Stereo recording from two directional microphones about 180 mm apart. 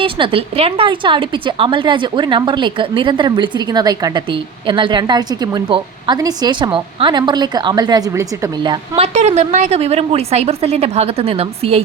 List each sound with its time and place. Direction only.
0.0 s a woman's voice: 30° right (ahead or behind)
9.0 s a woman's voice: 40° right (ahead or behind)